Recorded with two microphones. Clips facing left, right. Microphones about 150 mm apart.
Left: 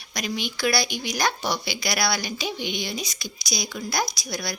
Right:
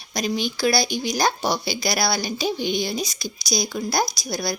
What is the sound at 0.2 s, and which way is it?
Speech, 35° right (ahead or behind).